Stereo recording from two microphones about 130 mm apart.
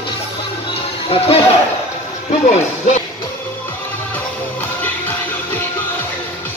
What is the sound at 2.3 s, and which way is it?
Speech, 65° left (ahead or behind).